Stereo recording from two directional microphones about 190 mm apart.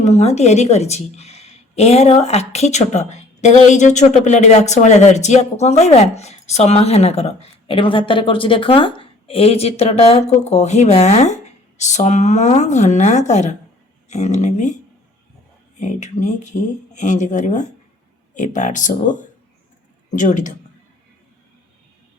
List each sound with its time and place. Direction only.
0.0 s a woman's voice: 35° left (ahead or behind)
15.8 s a woman's voice: 40° left (ahead or behind)